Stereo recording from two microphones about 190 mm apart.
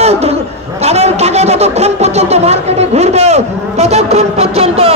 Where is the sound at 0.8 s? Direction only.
35° right (ahead or behind).